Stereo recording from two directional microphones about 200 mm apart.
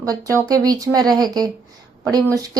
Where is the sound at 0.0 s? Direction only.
15° right (ahead or behind).